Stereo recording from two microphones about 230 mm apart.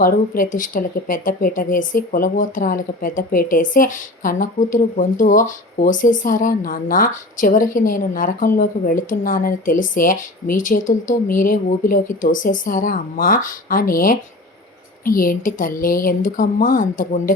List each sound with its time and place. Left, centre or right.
0.0 s speech: left